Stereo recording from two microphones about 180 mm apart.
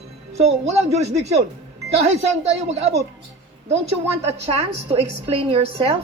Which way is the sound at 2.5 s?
35° right (ahead or behind).